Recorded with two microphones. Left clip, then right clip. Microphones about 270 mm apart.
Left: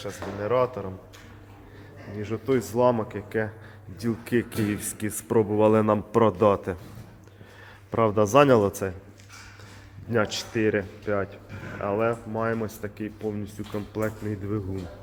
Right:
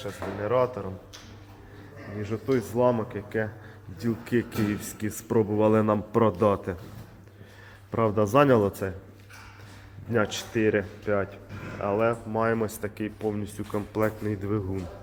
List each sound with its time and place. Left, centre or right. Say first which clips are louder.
0.0 s a man's voice: even; centre
2.2 s speech: left 2 dB; centre
7.9 s speech: left 2 dB; centre
10.1 s a man's voice: left 1 dB; centre
12.4 s speech: right 2 dB; centre